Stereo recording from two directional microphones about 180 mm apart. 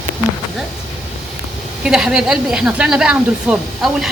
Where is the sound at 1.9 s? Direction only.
5° right (ahead or behind).